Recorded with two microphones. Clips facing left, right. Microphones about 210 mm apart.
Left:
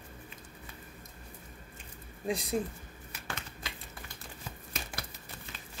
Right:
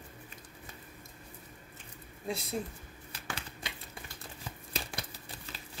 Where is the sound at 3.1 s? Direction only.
30° right (ahead or behind).